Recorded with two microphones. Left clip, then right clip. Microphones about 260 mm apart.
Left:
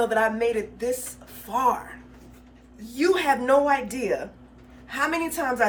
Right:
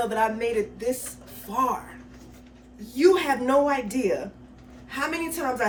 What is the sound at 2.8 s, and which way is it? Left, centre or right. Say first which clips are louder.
Speech: right 1 dB; centre.